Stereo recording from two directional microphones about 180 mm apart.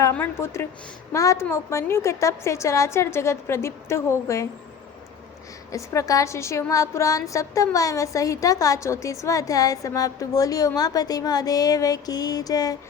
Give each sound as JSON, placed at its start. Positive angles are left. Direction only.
{"t": 0.0, "sound": "a woman's voice", "side_deg": 10}
{"t": 5.7, "sound": "a woman's voice", "side_deg": 15}